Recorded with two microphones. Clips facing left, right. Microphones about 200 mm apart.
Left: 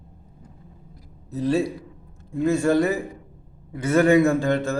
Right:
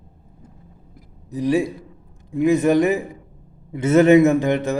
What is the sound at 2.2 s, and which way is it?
A man's voice, 15° right (ahead or behind).